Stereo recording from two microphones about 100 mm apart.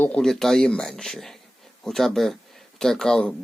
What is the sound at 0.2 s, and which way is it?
Speech, 5° left (ahead or behind).